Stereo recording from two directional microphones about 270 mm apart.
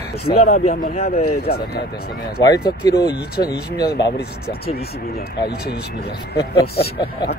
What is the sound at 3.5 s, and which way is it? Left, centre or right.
Speech, left.